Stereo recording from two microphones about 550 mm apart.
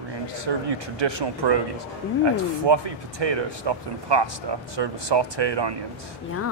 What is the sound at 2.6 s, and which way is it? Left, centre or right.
Speech, right.